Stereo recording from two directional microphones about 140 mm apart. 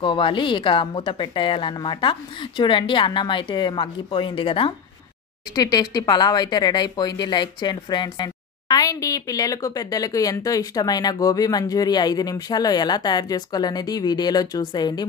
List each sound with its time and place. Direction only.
0.0 s a woman's voice: 35° left (ahead or behind)
5.5 s speech: 30° left (ahead or behind)